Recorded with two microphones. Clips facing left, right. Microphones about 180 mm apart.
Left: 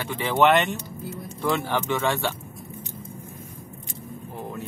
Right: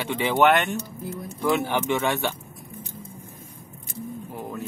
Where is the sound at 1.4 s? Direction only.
15° right (ahead or behind).